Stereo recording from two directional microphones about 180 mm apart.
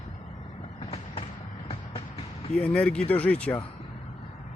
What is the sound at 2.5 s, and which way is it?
Speech, 5° left (ahead or behind).